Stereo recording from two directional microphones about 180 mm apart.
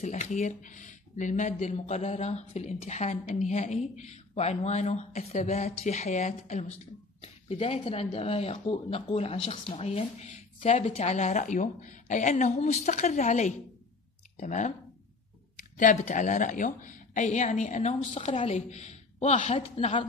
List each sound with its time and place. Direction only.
0.0 s speech: 40° left (ahead or behind)